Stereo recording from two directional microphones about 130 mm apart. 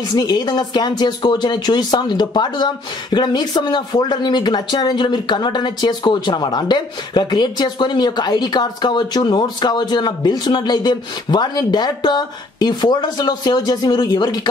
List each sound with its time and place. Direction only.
0.1 s speech: 35° left (ahead or behind)